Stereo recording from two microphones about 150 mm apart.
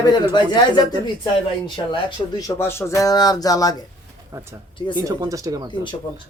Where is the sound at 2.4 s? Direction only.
15° left (ahead or behind).